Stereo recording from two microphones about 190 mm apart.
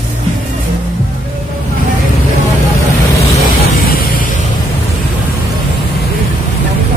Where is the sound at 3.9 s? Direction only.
50° left (ahead or behind).